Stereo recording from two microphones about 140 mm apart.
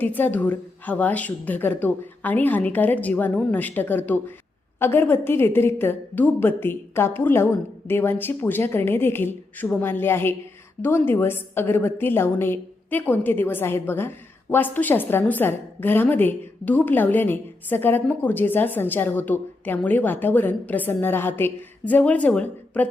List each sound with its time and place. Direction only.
0.0 s a woman's voice: 10° left (ahead or behind)